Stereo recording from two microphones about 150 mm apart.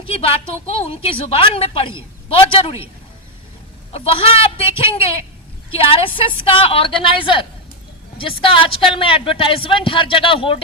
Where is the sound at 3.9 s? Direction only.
40° left (ahead or behind).